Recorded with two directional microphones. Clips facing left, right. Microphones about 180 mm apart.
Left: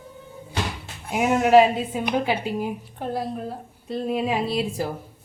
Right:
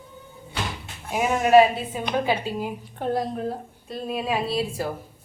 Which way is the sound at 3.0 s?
5° left (ahead or behind).